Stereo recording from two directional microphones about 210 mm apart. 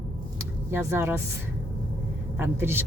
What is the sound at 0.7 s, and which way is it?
Speech, 10° right (ahead or behind).